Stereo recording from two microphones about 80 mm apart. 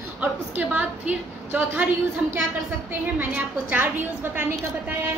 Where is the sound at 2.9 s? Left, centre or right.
Right.